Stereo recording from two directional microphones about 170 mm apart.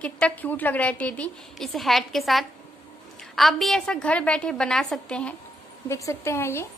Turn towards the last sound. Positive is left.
turn(degrees=15)  # may be behind; listen again after turning